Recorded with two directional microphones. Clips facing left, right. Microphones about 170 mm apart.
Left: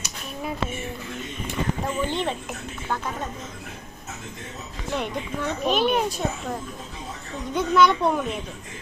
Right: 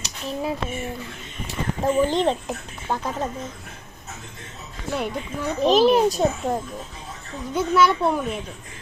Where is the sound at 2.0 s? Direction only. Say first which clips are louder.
Right 6 dB; 35° right (ahead or behind).